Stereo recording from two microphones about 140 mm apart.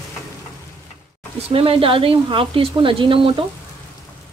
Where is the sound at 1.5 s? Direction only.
40° right (ahead or behind).